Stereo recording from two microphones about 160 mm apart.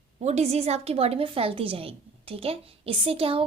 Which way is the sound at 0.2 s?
40° right (ahead or behind).